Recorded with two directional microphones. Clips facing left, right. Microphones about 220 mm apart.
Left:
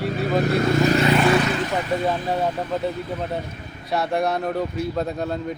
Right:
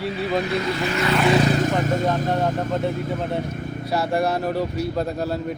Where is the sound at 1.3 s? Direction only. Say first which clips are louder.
Right 1 dB; 25° right (ahead or behind).